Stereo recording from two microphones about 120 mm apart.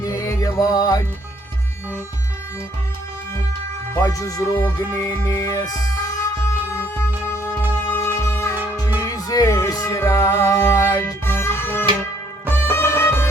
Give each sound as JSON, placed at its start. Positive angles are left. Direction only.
{"t": 0.0, "sound": "music", "side_deg": 30}
{"t": 3.9, "sound": "speech", "side_deg": 30}
{"t": 7.3, "sound": "music", "side_deg": 20}